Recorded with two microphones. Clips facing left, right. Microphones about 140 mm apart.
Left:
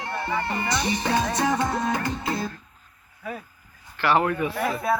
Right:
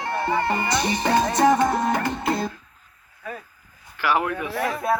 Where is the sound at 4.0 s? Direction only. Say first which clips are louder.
Left 1 dB; 10° right (ahead or behind).